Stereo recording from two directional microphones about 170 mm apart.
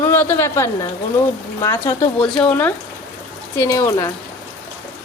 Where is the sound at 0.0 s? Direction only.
15° left (ahead or behind).